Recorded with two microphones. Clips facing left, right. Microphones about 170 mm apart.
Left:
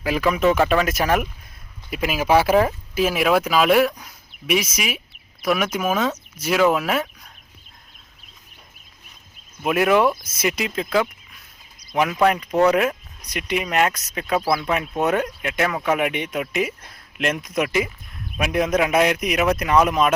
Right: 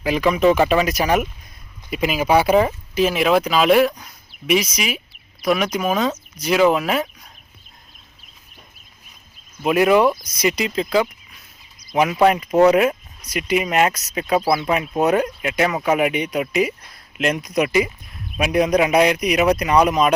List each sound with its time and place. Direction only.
0.0 s speech: centre (ahead or behind)
9.6 s speech: centre (ahead or behind)
12.5 s speech: 20° right (ahead or behind)
13.2 s speech: 5° right (ahead or behind)